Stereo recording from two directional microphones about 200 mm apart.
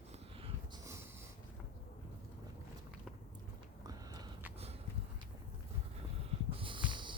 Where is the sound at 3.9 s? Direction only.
20° right (ahead or behind).